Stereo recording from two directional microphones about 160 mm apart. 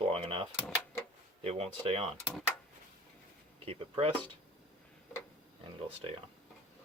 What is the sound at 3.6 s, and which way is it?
Speech, 40° right (ahead or behind).